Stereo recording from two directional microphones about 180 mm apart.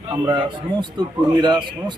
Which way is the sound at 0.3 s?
25° right (ahead or behind).